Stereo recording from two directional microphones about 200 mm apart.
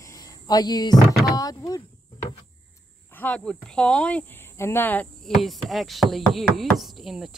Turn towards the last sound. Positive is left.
turn(degrees=0)  # may be behind; listen again after turning